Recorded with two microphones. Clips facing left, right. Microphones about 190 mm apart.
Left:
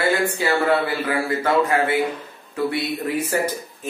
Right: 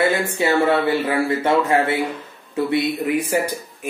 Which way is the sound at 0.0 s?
20° right (ahead or behind).